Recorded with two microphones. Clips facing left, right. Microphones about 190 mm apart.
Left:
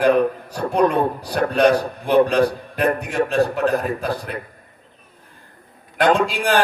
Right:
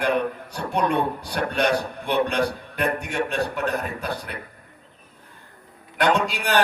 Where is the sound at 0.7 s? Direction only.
50° left (ahead or behind).